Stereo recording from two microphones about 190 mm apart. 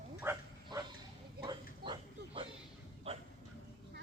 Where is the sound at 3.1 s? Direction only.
30° right (ahead or behind).